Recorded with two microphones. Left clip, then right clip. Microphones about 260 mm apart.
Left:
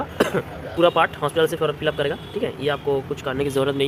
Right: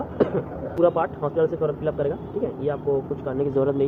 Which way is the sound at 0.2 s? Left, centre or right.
Left.